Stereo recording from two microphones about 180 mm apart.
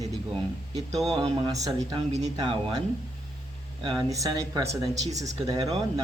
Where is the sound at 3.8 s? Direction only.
20° right (ahead or behind).